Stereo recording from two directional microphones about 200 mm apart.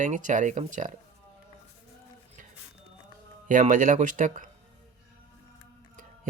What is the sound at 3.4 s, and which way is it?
Speech, 40° right (ahead or behind).